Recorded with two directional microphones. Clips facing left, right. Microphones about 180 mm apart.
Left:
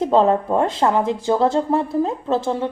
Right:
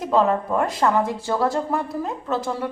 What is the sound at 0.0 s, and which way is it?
A woman's voice, 30° left (ahead or behind).